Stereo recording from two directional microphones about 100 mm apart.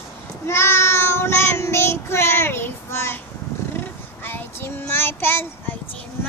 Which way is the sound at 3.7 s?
20° left (ahead or behind).